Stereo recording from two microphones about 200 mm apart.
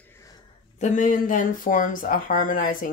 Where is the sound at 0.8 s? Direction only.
40° left (ahead or behind).